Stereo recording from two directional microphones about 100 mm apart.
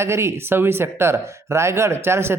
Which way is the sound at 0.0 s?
25° right (ahead or behind).